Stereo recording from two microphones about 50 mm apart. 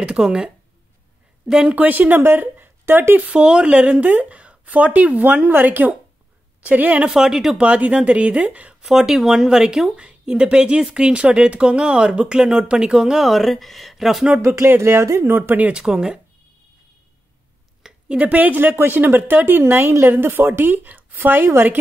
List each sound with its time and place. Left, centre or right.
0.0 s speech: centre
1.5 s speech: centre
1.8 s speech: right
2.1 s speech: right
3.3 s speech: right
7.1 s speech: centre
7.6 s speech: right
8.8 s speech: centre
14.8 s speech: right
15.7 s speech: centre
17.8 s speech: right
18.6 s a woman's voice: right